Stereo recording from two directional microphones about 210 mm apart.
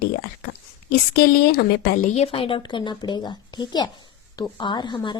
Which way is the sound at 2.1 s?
30° left (ahead or behind).